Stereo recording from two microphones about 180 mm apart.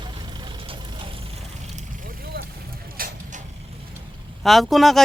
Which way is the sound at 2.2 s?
65° right (ahead or behind).